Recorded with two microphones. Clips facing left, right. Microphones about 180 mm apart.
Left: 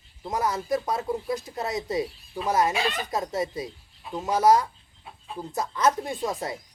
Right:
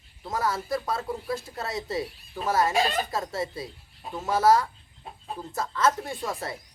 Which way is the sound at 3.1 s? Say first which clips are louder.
Left 2 dB; 20° left (ahead or behind).